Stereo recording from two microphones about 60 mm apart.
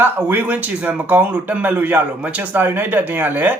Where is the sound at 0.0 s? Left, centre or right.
Right.